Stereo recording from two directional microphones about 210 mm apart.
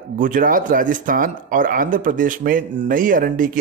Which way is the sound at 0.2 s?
40° right (ahead or behind).